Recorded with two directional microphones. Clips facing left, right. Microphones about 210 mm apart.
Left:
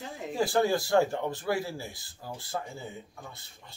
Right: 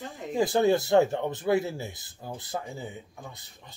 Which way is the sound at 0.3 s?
20° right (ahead or behind).